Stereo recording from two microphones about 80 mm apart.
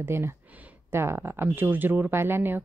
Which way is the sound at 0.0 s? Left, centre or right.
Right.